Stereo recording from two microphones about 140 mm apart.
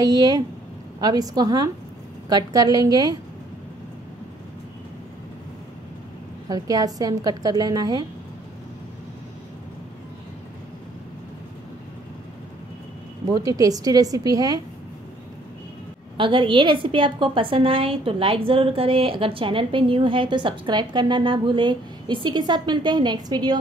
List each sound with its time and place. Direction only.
0.0 s a woman's voice: 25° right (ahead or behind)
6.5 s a woman's voice: 25° right (ahead or behind)
13.3 s a woman's voice: 25° right (ahead or behind)
16.2 s a woman's voice: 35° right (ahead or behind)